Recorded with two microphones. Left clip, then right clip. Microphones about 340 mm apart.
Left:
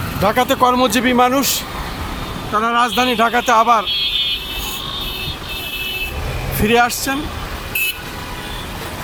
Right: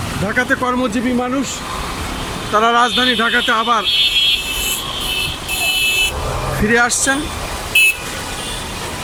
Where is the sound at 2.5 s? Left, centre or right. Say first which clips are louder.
Right 2 dB; centre.